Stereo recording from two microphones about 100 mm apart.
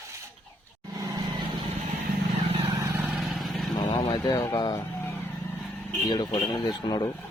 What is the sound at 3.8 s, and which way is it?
Speech, 45° left (ahead or behind).